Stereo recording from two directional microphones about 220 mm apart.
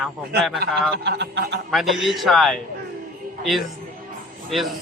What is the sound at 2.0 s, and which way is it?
Speech, centre (ahead or behind).